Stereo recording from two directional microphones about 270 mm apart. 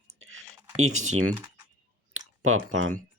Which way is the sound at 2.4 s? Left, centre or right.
Right.